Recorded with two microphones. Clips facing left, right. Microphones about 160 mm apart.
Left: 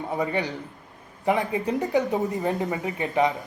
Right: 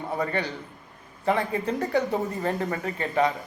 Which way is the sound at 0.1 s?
15° left (ahead or behind).